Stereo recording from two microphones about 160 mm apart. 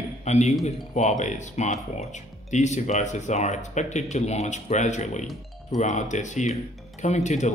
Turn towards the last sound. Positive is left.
turn(degrees=45)  # may be behind; listen again after turning